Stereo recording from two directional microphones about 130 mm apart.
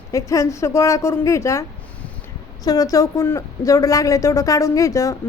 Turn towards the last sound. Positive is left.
turn(degrees=25)  # may be behind; listen again after turning